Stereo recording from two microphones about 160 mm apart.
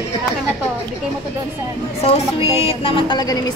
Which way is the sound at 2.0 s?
35° left (ahead or behind).